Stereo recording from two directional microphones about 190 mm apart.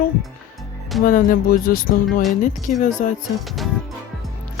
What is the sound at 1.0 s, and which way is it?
Speech, 45° left (ahead or behind).